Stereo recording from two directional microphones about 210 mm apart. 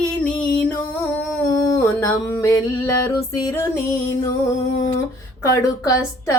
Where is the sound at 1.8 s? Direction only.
10° left (ahead or behind).